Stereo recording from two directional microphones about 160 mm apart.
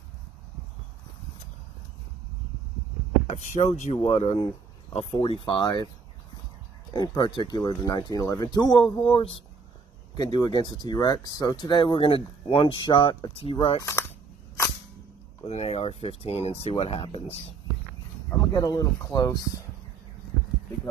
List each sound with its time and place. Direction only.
3.3 s speech: 50° left (ahead or behind); by 5.9 s 25° left (ahead or behind)
6.9 s speech: 25° left (ahead or behind)
13.7 s speech: 15° left (ahead or behind)
15.4 s speech: 40° left (ahead or behind)
18.3 s speech: 20° left (ahead or behind)